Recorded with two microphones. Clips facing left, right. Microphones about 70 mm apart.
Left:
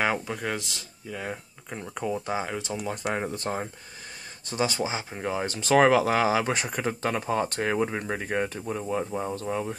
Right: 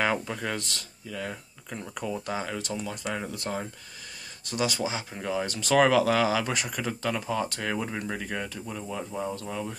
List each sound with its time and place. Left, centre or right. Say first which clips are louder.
0.0 s speech: left 1 dB; centre
2.9 s speech: left 4 dB; left